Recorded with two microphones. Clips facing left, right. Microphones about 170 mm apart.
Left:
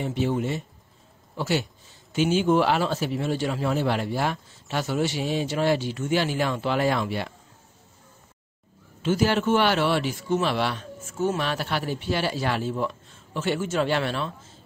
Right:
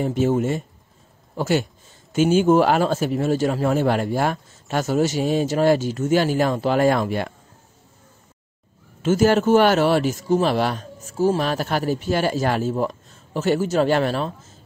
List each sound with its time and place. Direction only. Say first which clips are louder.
0.0 s speech: right 6 dB; 45° right (ahead or behind)
9.0 s a man's voice: right 6 dB; 45° right (ahead or behind)